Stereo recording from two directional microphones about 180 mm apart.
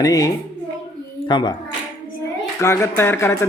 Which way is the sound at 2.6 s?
15° left (ahead or behind).